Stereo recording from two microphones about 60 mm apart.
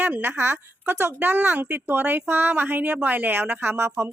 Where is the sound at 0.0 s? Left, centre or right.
Right.